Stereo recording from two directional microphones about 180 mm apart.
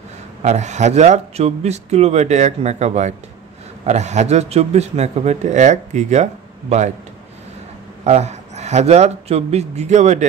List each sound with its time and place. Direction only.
0.4 s a man's voice: 40° right (ahead or behind)
8.0 s a man's voice: 40° right (ahead or behind)